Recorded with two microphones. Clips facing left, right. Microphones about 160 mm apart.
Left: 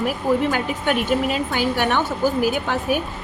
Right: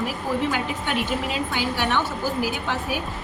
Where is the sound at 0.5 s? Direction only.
50° left (ahead or behind).